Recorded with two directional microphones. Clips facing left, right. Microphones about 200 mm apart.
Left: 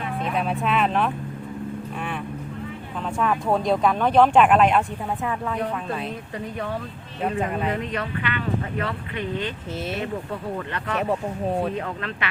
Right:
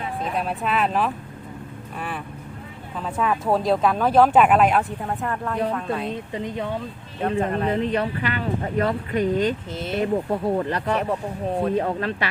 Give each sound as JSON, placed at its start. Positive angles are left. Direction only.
{"t": 0.3, "sound": "speech", "side_deg": 0}
{"t": 3.2, "sound": "speech", "side_deg": 0}
{"t": 6.3, "sound": "speech", "side_deg": -20}
{"t": 7.2, "sound": "speech", "side_deg": 5}
{"t": 7.7, "sound": "speech", "side_deg": -30}